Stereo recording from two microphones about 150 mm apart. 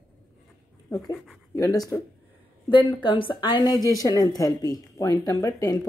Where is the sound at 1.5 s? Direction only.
20° left (ahead or behind).